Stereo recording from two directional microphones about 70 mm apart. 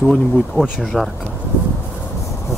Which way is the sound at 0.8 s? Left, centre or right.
Centre.